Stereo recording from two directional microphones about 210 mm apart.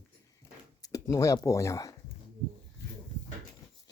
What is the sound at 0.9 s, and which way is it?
Speech, 15° left (ahead or behind).